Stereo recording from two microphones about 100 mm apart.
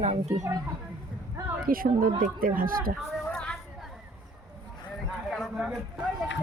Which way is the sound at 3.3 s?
10° left (ahead or behind).